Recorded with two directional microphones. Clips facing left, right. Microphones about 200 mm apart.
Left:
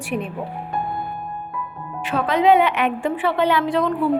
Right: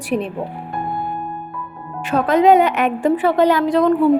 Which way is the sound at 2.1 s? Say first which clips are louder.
Right 4 dB; 45° right (ahead or behind).